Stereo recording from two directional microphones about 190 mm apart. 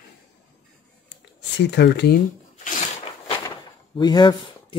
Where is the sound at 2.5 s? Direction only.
45° left (ahead or behind).